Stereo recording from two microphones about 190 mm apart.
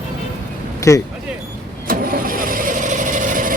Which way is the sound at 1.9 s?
50° right (ahead or behind).